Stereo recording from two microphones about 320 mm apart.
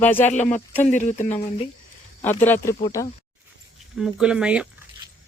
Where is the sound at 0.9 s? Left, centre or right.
Left.